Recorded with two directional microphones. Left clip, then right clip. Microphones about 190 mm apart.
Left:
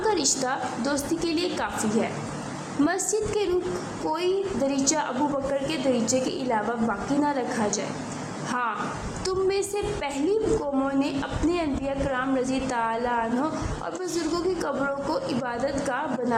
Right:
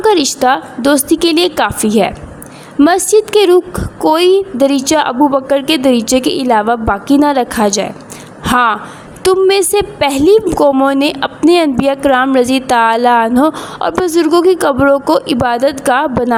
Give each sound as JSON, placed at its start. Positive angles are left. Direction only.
{"t": 0.0, "sound": "a woman's voice", "side_deg": -45}